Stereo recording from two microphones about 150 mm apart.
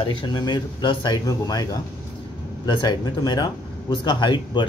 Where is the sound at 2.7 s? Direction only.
30° left (ahead or behind).